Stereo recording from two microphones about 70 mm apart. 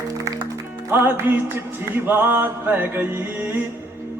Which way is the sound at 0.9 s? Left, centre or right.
Right.